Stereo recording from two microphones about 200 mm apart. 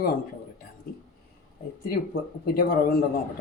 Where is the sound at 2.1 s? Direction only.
50° left (ahead or behind).